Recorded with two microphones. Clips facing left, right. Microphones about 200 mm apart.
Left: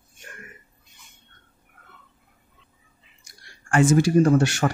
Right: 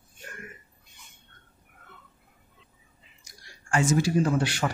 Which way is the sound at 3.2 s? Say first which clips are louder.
Left 2 dB; 55° left (ahead or behind).